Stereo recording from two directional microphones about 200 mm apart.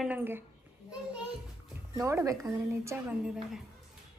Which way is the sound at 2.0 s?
15° right (ahead or behind).